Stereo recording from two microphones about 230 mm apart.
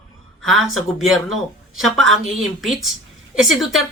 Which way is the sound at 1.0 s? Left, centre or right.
Centre.